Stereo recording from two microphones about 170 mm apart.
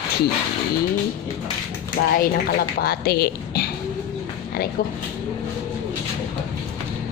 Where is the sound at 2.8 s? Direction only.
65° left (ahead or behind).